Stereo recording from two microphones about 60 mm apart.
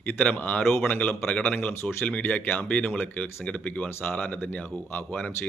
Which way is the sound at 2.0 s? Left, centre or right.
Left.